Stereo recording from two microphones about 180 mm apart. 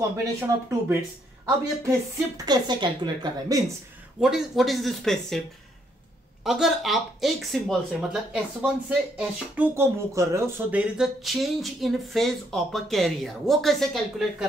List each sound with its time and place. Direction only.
0.5 s speech: 20° right (ahead or behind)
4.2 s speech: centre (ahead or behind)
6.4 s speech: centre (ahead or behind)